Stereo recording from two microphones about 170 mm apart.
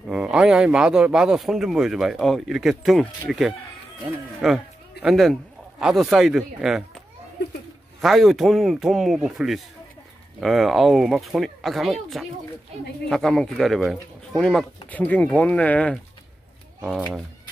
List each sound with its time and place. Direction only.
0.1 s speech: 5° right (ahead or behind)
8.0 s speech: centre (ahead or behind)